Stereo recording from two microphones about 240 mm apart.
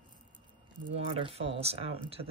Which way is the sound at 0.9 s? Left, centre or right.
Right.